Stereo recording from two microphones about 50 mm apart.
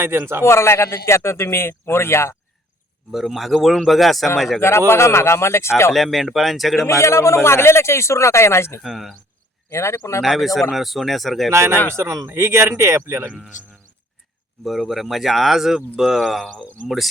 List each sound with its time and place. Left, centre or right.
0.0 s a man's voice: right
0.4 s a man's voice: left
3.1 s speech: centre
4.9 s a man's voice: left
5.9 s speech: centre
6.8 s a man's voice: left
8.8 s speech: centre
9.6 s speech: left
10.2 s speech: centre
11.5 s speech: right
11.9 s speech: right
14.6 s speech: centre